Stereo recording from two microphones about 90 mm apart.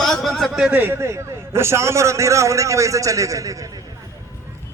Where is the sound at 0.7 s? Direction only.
25° right (ahead or behind); by 3.8 s 40° right (ahead or behind).